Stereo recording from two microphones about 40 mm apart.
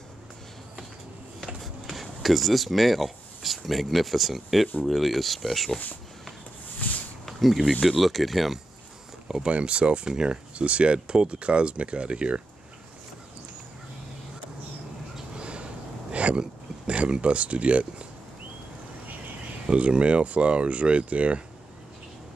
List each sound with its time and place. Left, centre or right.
1.6 s speech: centre
6.8 s a sound: left
7.2 s a sound: centre
7.8 s speech: centre
9.5 s speech: right
10.6 s speech: right
15.3 s a sound: right
17.2 s speech: right
19.6 s speech: right